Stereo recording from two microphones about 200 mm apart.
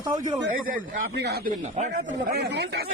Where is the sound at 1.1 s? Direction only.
55° right (ahead or behind).